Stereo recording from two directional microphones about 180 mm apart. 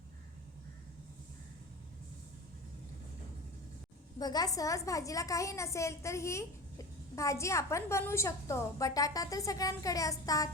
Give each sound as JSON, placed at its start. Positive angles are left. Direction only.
{"t": 4.2, "sound": "a woman's voice", "side_deg": 20}